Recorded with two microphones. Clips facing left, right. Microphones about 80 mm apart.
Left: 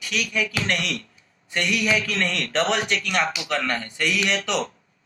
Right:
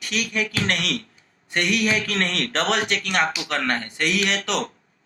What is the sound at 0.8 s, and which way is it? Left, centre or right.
A man's voice, right.